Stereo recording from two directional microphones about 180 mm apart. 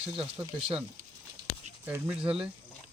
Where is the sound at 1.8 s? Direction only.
10° right (ahead or behind).